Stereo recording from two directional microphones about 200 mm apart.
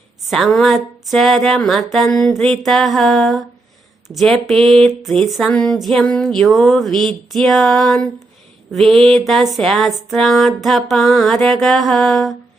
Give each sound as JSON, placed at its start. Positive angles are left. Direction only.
{"t": 0.3, "sound": "music", "side_deg": 0}